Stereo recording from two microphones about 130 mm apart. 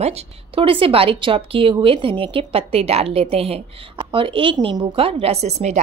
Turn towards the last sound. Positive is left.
turn(degrees=-60)  # may be behind; listen again after turning